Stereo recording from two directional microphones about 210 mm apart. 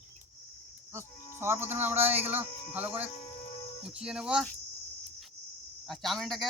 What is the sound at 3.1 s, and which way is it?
Music, 30° left (ahead or behind).